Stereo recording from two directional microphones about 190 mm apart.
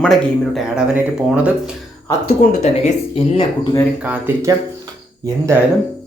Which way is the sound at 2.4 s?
35° left (ahead or behind).